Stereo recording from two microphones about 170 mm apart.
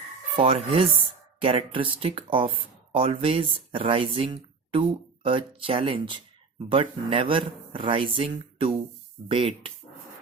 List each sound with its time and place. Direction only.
0.3 s speech: 35° right (ahead or behind)